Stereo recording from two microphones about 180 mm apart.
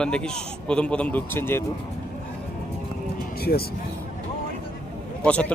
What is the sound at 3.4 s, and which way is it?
Speech, 60° left (ahead or behind).